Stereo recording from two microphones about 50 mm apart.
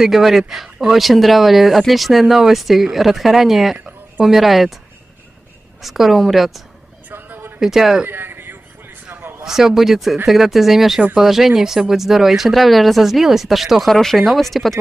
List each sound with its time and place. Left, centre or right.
0.0 s speech: centre
5.8 s speech: centre
7.1 s a sound: right
7.6 s a man's voice: centre
8.1 s a sound: right
9.4 s a man's voice: centre